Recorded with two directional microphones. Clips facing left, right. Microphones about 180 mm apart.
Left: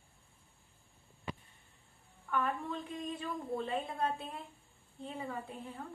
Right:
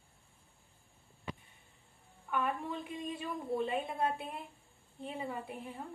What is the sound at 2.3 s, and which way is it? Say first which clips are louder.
A woman's voice: even; 10° right (ahead or behind).